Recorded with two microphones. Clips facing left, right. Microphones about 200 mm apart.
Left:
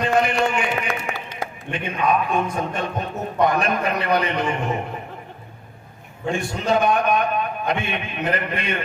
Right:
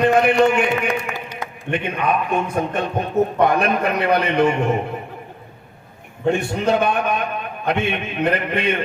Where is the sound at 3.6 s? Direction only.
60° right (ahead or behind).